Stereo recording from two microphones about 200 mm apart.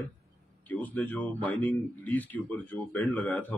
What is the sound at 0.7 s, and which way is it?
Speech, 10° left (ahead or behind).